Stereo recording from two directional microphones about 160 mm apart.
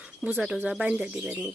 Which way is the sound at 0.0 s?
10° right (ahead or behind).